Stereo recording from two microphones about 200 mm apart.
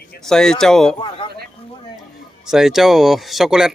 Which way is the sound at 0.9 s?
25° left (ahead or behind).